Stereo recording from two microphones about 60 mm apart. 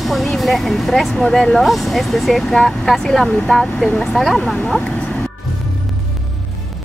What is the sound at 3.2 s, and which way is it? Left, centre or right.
Speech, centre.